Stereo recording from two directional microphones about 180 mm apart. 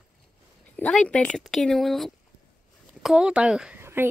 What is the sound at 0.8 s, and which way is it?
Speech, 5° left (ahead or behind).